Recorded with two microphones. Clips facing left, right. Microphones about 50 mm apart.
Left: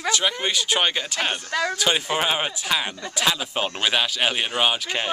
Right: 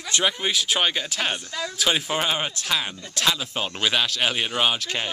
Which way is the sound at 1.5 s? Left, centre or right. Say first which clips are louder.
Left 7 dB; left.